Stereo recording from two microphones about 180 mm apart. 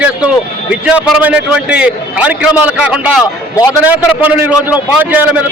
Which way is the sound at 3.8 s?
10° right (ahead or behind).